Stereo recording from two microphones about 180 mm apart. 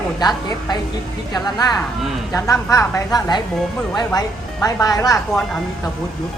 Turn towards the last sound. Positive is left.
turn(degrees=20)  # may be behind; listen again after turning